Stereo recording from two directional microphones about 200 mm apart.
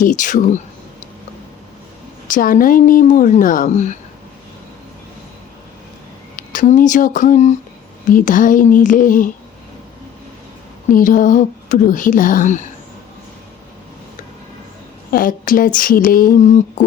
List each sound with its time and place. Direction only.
0.0 s speech: 40° left (ahead or behind)
2.2 s speech: 45° left (ahead or behind)
6.3 s speech: 40° left (ahead or behind)
10.9 s speech: 40° left (ahead or behind)
15.1 s speech: 45° left (ahead or behind)